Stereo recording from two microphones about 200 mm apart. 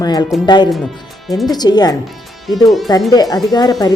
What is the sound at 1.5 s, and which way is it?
Speech, 20° left (ahead or behind).